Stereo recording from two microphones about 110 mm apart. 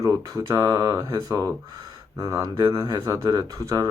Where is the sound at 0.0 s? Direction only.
30° right (ahead or behind).